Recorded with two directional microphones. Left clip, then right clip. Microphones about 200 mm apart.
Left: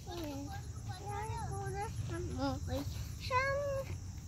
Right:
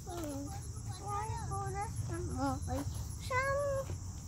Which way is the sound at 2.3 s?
15° right (ahead or behind).